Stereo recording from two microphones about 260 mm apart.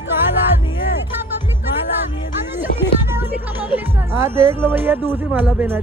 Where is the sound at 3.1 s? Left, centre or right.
Centre.